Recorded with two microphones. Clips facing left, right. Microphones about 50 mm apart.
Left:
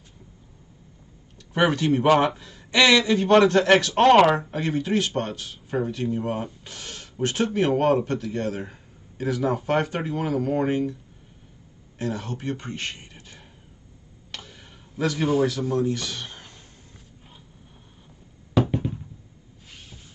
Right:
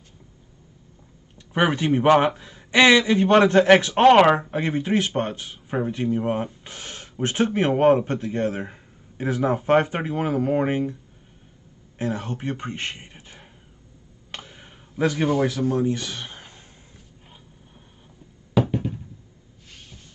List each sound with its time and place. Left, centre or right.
1.5 s speech: right
4.3 s speech: right
12.0 s a man's voice: right
14.3 s a sound: right
15.7 s speech: right